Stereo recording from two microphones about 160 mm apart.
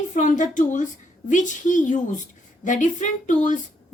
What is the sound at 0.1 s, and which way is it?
A woman's voice, 50° left (ahead or behind).